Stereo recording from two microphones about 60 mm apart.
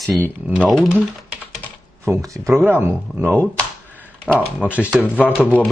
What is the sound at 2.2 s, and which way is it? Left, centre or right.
Speech, right.